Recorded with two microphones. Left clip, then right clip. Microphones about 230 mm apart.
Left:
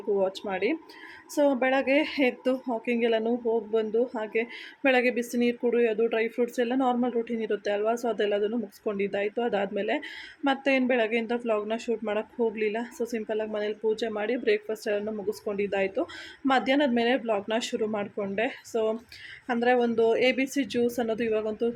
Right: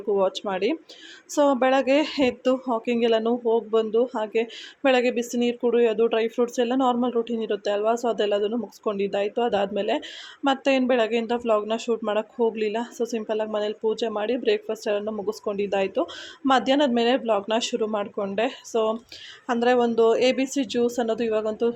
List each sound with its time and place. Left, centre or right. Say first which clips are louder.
0.2 s a woman's voice: right 4 dB; centre